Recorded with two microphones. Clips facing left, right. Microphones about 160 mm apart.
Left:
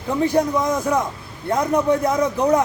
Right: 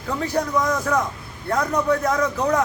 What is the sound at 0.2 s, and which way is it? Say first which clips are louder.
Speech: left 5 dB; 20° left (ahead or behind).